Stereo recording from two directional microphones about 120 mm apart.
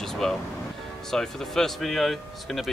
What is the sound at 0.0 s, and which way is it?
Music, 5° left (ahead or behind).